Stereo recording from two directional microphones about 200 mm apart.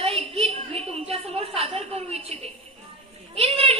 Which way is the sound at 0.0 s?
30° right (ahead or behind).